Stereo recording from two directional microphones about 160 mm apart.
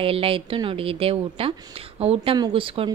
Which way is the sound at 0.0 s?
35° right (ahead or behind).